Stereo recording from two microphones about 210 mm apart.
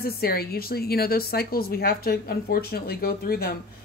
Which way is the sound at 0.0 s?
45° left (ahead or behind).